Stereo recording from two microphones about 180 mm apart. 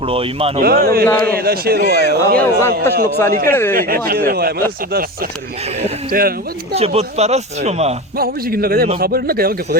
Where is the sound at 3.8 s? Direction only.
55° right (ahead or behind).